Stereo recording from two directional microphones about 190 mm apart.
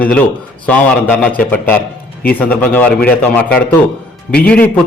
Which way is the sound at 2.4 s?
10° left (ahead or behind).